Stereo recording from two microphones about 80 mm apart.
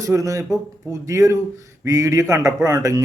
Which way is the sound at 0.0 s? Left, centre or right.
Right.